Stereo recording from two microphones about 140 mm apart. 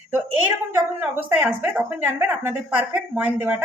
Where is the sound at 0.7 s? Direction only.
15° right (ahead or behind).